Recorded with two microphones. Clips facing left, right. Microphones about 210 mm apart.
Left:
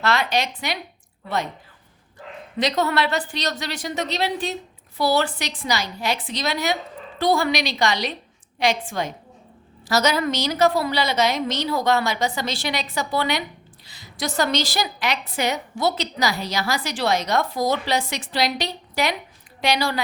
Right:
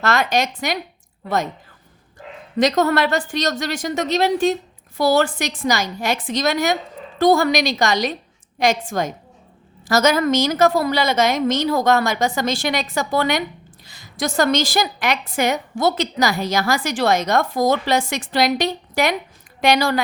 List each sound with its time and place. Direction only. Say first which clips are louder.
0.0 s a woman's voice: right 3 dB; 45° right (ahead or behind)
2.6 s a woman's voice: right 5 dB; 45° right (ahead or behind)